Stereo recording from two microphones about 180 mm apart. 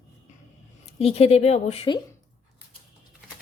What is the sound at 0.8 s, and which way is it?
A woman's voice, 35° left (ahead or behind).